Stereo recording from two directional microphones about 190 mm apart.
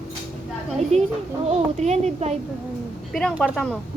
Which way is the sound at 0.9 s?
35° right (ahead or behind).